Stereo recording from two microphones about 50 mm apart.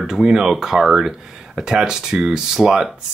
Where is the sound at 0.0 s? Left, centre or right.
Centre.